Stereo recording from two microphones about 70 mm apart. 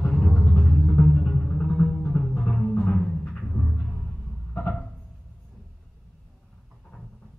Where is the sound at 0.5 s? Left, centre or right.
Centre.